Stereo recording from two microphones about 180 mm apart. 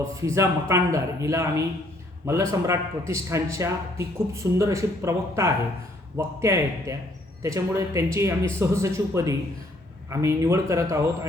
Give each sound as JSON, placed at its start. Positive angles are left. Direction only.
{"t": 0.0, "sound": "a man's voice", "side_deg": -15}